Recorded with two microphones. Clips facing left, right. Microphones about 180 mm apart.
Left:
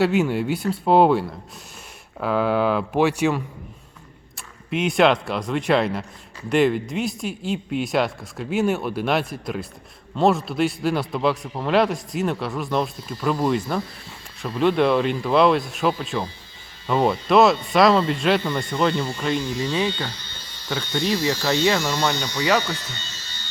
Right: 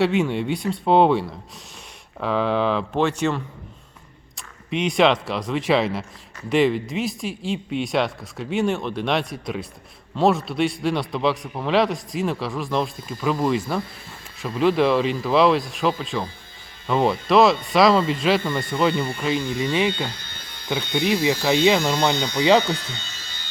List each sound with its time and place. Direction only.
0.0 s a man's voice: centre (ahead or behind)
2.2 s a man's voice: 5° left (ahead or behind)
19.4 s speech: 55° right (ahead or behind)
20.1 s electric shaver: 55° right (ahead or behind)
21.1 s speech: 15° right (ahead or behind)